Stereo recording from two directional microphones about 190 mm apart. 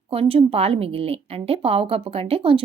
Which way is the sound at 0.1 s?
30° right (ahead or behind).